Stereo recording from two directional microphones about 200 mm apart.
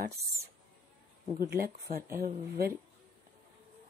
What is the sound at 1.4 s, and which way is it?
Speech, 50° right (ahead or behind).